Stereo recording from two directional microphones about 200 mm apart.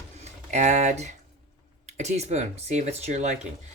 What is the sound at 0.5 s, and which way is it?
Speech, 35° right (ahead or behind).